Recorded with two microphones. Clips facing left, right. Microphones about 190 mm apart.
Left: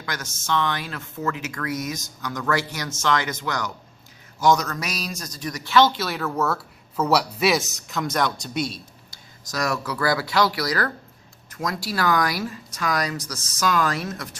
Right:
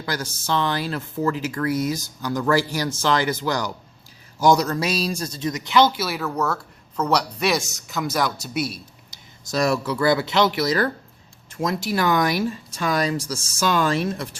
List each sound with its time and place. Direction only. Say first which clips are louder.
0.0 s a man's voice: right 5 dB; 35° right (ahead or behind); by 8.8 s 5° right (ahead or behind)
9.0 s speech: right 5 dB; 25° right (ahead or behind)